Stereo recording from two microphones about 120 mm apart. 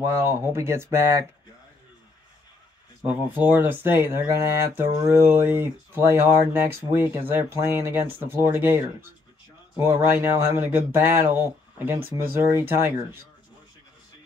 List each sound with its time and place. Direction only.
0.0 s speech: 25° right (ahead or behind)
3.0 s speech: 15° right (ahead or behind)